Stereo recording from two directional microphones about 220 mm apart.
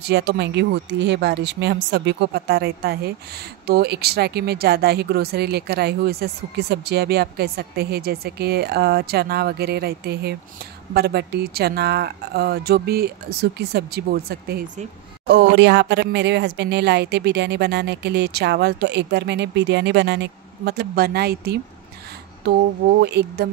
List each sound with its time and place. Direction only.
0.0 s speech: 50° right (ahead or behind)